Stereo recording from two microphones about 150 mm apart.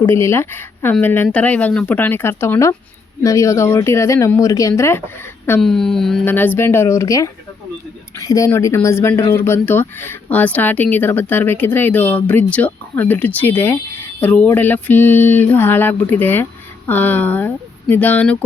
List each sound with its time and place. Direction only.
0.1 s speech: 20° left (ahead or behind)
5.5 s speech: 5° left (ahead or behind)